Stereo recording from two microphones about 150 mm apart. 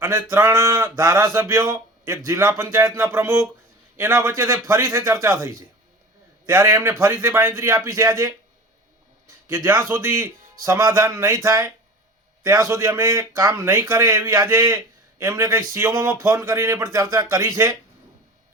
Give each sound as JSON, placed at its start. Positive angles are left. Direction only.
{"t": 0.0, "sound": "speech", "side_deg": -15}
{"t": 9.5, "sound": "speech", "side_deg": -15}